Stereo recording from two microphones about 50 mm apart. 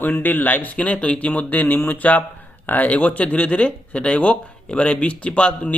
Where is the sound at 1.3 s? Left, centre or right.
Left.